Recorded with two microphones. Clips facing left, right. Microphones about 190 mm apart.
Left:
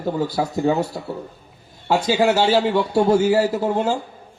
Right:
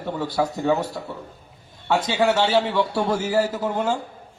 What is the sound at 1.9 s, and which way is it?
A man's voice, 30° left (ahead or behind).